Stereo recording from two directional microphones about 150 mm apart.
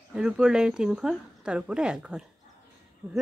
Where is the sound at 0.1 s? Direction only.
5° right (ahead or behind).